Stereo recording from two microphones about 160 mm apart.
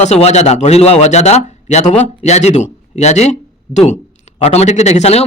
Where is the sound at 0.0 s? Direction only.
45° left (ahead or behind).